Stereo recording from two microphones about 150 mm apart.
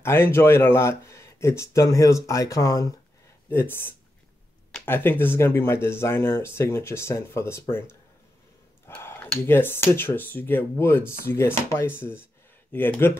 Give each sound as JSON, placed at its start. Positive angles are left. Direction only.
{"t": 0.0, "sound": "speech", "side_deg": 15}
{"t": 8.8, "sound": "speech", "side_deg": 15}